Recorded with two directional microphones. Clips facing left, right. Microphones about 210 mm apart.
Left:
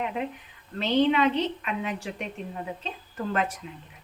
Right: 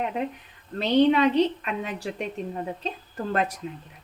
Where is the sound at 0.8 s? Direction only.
40° right (ahead or behind).